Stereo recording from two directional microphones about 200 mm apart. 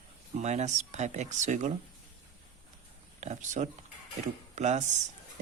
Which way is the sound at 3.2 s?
35° right (ahead or behind).